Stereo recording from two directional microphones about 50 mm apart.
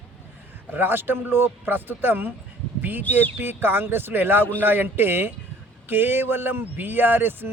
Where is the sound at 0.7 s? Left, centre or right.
Right.